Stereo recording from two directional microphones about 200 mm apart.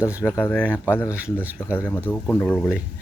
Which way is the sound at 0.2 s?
15° left (ahead or behind).